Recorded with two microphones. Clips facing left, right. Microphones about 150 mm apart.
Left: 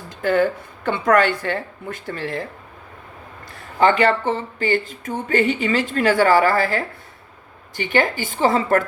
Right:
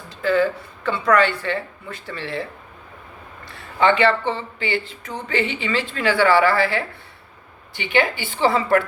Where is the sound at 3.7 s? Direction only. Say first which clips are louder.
Left 1 dB; 40° left (ahead or behind).